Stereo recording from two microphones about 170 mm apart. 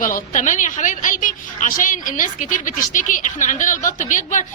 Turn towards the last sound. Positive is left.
turn(degrees=45)  # may be behind; listen again after turning